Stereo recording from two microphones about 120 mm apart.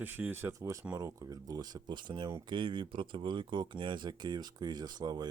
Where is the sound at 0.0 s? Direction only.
15° right (ahead or behind).